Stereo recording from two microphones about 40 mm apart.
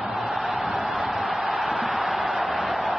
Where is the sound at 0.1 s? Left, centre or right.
Centre.